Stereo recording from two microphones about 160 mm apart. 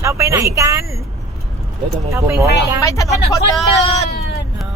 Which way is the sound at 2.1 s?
15° right (ahead or behind).